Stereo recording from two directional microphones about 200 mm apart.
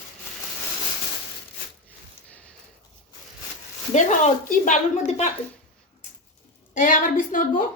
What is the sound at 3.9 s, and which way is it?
A woman's voice, 35° left (ahead or behind).